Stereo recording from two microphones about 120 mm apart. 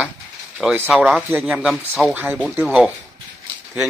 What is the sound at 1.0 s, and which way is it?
Speech, 5° right (ahead or behind).